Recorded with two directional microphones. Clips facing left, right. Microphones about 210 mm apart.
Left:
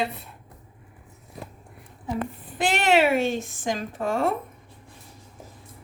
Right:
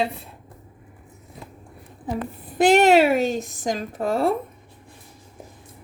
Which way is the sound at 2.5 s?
40° right (ahead or behind).